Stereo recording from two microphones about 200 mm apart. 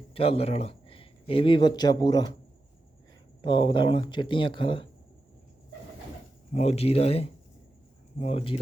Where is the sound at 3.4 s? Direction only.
25° left (ahead or behind).